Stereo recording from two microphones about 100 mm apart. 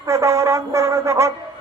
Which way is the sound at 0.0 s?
30° right (ahead or behind).